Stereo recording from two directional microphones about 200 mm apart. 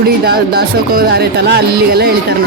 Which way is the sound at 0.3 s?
50° right (ahead or behind).